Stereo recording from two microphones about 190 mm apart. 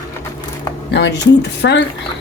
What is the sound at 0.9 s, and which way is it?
Speech, 65° left (ahead or behind).